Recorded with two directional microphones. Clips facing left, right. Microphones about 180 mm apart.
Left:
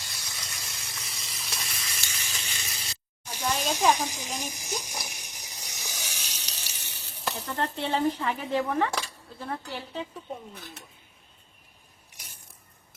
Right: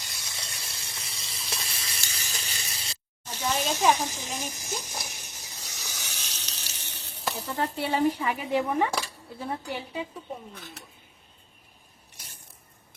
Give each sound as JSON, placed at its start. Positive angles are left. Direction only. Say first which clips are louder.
{"t": 0.0, "sound": "gush", "louder": "right 1 dB", "side_deg": -25}
{"t": 3.6, "sound": "speech", "louder": "even", "side_deg": 15}
{"t": 3.9, "sound": "a sound", "louder": "even", "side_deg": 15}
{"t": 6.9, "sound": "speech", "louder": "right 1 dB", "side_deg": -5}